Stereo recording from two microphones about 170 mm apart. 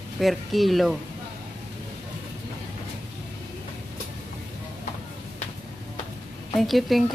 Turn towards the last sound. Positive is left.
turn(degrees=0)  # may be behind; listen again after turning